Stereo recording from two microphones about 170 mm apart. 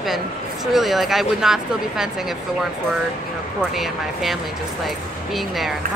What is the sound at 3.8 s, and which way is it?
Speech, centre (ahead or behind).